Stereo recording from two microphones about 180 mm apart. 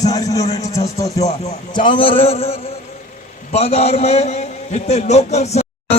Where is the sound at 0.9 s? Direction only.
20° left (ahead or behind).